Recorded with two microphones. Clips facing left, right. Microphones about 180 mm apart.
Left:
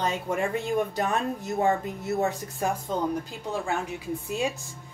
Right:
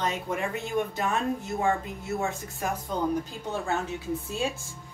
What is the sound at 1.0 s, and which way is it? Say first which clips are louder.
Speech: left 1 dB; 40° left (ahead or behind).